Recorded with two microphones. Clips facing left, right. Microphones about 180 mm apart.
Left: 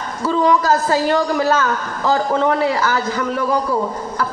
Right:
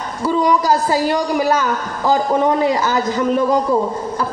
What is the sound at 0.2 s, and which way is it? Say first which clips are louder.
A woman's voice: even; 15° right (ahead or behind).